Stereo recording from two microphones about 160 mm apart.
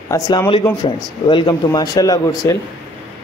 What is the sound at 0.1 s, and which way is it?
Speech, 20° left (ahead or behind).